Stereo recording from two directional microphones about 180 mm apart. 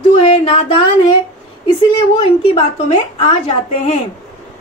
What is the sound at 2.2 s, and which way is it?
Speech, 35° left (ahead or behind).